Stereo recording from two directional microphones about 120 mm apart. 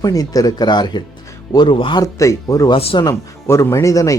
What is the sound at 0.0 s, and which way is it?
Speech, 30° left (ahead or behind).